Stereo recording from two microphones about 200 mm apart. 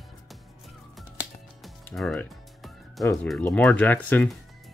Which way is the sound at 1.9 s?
5° left (ahead or behind).